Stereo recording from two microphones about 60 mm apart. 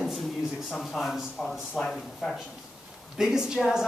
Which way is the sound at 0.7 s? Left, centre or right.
Centre.